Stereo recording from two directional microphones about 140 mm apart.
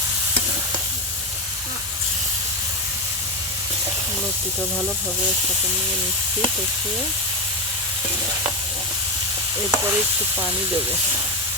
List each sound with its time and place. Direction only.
9.7 s sizzle: 20° right (ahead or behind)